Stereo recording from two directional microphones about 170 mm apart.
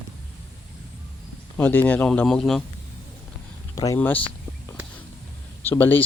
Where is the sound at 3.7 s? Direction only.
20° left (ahead or behind).